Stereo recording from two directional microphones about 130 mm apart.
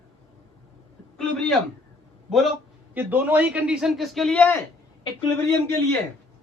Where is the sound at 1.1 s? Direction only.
5° left (ahead or behind).